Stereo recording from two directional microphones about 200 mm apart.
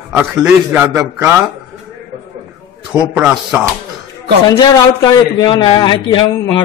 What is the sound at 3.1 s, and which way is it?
Speech, 5° right (ahead or behind).